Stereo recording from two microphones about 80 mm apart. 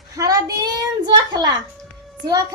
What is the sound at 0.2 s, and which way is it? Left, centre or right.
Child singing, right.